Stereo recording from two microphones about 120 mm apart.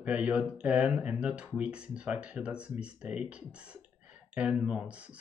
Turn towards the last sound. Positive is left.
turn(degrees=-10)  # may be behind; listen again after turning